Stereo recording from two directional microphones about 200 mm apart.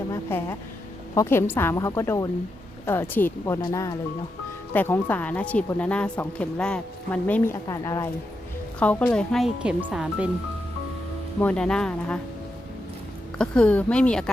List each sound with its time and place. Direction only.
0.1 s vehicle: 10° left (ahead or behind)
1.1 s speech: 15° left (ahead or behind); by 10.2 s 5° right (ahead or behind)
11.3 s speech: 5° left (ahead or behind)
13.4 s speech: 5° left (ahead or behind)